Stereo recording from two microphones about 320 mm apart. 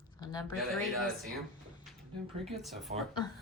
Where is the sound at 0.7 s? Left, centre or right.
Centre.